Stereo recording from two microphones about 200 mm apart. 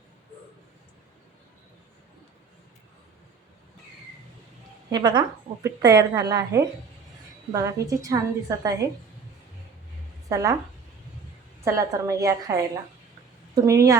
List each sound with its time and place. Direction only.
4.9 s a woman's voice: 20° right (ahead or behind)
10.2 s a woman's voice: 15° right (ahead or behind)
11.6 s a woman's voice: 15° right (ahead or behind)